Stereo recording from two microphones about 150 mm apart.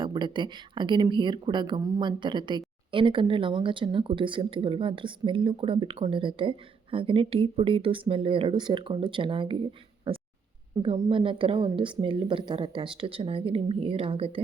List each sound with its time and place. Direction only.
0.0 s speech: 30° right (ahead or behind)
10.1 s a sound: 35° right (ahead or behind)
10.8 s speech: 35° right (ahead or behind)